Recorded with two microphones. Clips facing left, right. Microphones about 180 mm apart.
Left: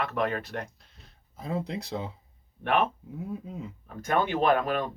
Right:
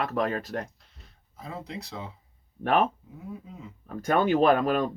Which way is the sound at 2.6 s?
40° right (ahead or behind).